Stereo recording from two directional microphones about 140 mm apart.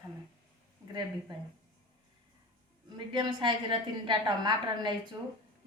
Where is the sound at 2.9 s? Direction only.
35° right (ahead or behind).